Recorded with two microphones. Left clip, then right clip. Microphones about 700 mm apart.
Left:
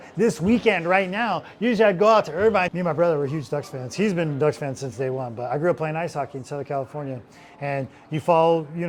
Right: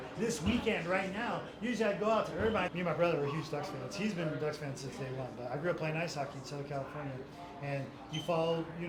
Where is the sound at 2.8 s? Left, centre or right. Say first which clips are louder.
Left 11 dB; left.